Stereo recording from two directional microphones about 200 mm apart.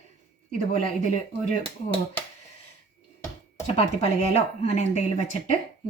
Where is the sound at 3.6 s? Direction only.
30° left (ahead or behind).